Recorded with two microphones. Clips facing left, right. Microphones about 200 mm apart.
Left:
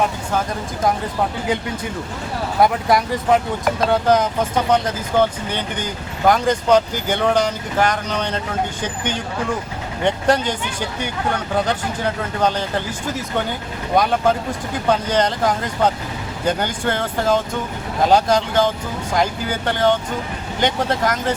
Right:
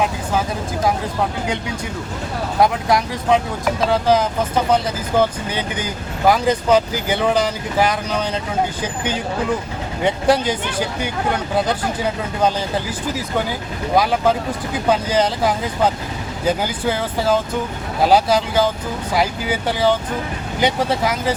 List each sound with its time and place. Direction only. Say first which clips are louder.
2.6 s speech: even; centre (ahead or behind)
10.0 s speech: right 1 dB; 5° right (ahead or behind)
13.9 s speech: even; 5° right (ahead or behind)